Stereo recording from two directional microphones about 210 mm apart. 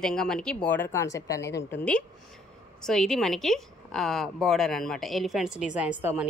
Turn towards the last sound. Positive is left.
turn(degrees=-5)  # may be behind; listen again after turning